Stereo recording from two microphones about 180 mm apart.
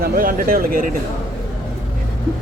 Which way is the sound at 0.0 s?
50° right (ahead or behind).